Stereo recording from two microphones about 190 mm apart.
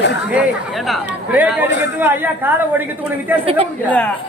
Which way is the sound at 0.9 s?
10° right (ahead or behind).